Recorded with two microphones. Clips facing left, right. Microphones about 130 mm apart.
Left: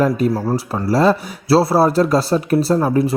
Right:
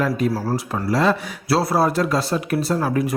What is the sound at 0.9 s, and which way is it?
Speech, 35° left (ahead or behind).